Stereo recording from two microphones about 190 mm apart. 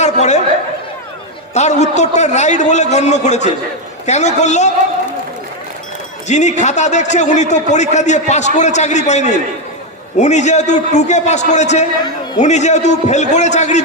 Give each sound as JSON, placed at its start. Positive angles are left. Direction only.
{"t": 0.0, "sound": "a sound", "side_deg": 35}
{"t": 1.5, "sound": "a man's voice", "side_deg": 35}
{"t": 6.2, "sound": "a man's voice", "side_deg": 40}